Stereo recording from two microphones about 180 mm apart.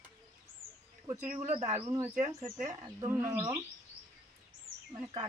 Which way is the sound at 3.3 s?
25° right (ahead or behind).